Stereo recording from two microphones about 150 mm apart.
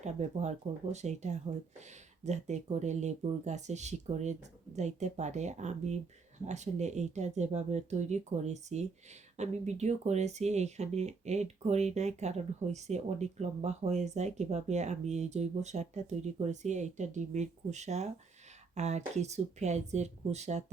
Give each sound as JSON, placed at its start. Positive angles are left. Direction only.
{"t": 0.0, "sound": "speech", "side_deg": -50}